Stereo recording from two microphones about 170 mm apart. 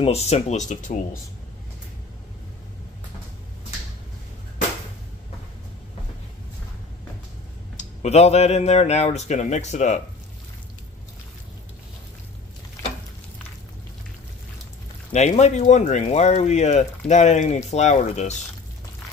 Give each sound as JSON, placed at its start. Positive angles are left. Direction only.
{"t": 0.0, "sound": "speech", "side_deg": 40}
{"t": 7.7, "sound": "speech", "side_deg": 40}
{"t": 15.1, "sound": "speech", "side_deg": 40}